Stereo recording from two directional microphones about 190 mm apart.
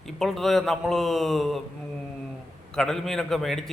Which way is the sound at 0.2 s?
Centre (ahead or behind).